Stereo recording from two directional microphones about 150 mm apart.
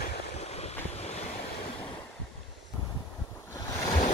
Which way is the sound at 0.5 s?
45° left (ahead or behind).